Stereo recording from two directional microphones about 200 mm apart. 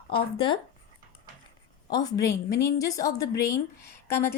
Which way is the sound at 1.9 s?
20° left (ahead or behind).